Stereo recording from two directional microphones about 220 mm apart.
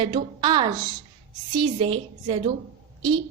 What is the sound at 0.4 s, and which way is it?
A woman's voice, 20° right (ahead or behind).